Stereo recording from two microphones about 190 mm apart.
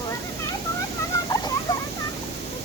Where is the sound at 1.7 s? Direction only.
20° left (ahead or behind).